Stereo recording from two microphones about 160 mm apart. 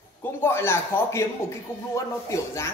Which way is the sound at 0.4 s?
15° left (ahead or behind).